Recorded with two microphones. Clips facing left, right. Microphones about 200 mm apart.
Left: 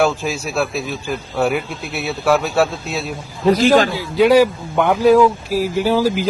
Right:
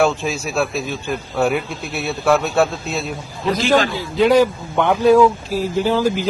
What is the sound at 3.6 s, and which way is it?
Speech, 45° left (ahead or behind).